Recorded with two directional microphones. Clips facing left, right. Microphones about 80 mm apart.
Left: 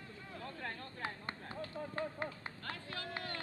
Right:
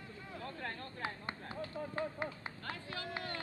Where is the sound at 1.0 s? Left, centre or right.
Centre.